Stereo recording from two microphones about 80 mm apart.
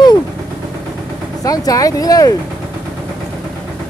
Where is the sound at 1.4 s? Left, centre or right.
Left.